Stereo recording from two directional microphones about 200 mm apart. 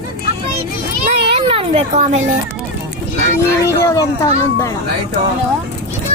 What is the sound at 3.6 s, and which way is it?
Speech, 15° left (ahead or behind).